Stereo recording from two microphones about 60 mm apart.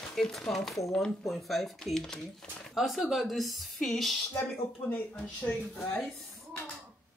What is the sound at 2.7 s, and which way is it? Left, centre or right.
Speech, centre.